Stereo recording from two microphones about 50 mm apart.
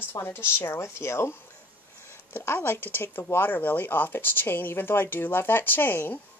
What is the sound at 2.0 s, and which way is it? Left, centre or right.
Speech, left.